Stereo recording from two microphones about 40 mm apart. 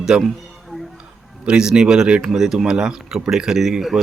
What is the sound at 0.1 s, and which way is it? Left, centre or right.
Speech, right.